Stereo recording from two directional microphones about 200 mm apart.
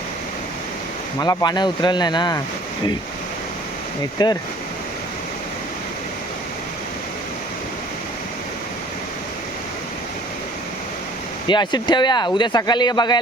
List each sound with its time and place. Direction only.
1.2 s speech: 20° left (ahead or behind)
4.2 s speech: 20° left (ahead or behind)
11.4 s speech: 20° left (ahead or behind)